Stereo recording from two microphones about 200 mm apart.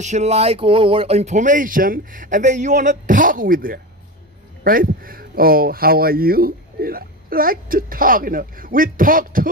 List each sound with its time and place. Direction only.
0.0 s speech: 35° right (ahead or behind)